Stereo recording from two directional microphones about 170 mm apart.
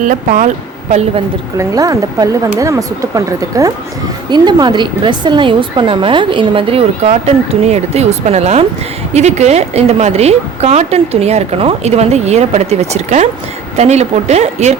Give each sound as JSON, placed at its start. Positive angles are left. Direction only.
{"t": 0.0, "sound": "speech", "side_deg": -50}
{"t": 1.5, "sound": "a woman's voice", "side_deg": -20}